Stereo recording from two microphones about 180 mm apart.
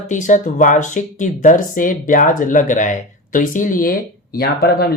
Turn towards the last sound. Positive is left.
turn(degrees=60)  # may be behind; listen again after turning